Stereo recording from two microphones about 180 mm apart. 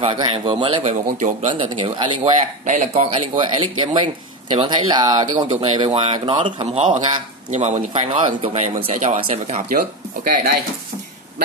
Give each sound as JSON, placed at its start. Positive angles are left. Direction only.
{"t": 0.0, "sound": "speech", "side_deg": -30}
{"t": 1.0, "sound": "speech", "side_deg": -40}
{"t": 1.5, "sound": "speech", "side_deg": -30}
{"t": 2.6, "sound": "speech", "side_deg": -40}